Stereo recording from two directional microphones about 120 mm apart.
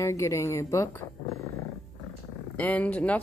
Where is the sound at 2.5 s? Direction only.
10° left (ahead or behind).